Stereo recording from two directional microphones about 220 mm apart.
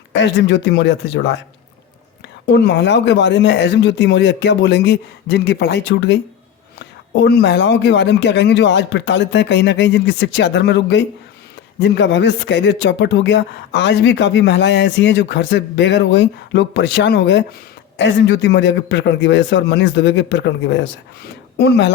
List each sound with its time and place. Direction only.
0.1 s speech: 55° left (ahead or behind)
2.5 s speech: 50° left (ahead or behind)